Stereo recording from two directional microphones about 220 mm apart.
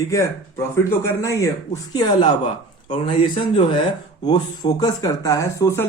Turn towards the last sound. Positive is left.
turn(degrees=10)  # may be behind; listen again after turning